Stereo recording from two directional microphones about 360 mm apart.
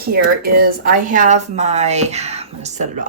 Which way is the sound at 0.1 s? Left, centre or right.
Right.